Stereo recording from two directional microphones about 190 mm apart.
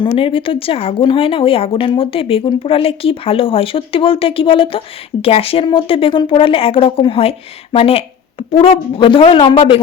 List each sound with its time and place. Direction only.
0.0 s speech: 25° left (ahead or behind)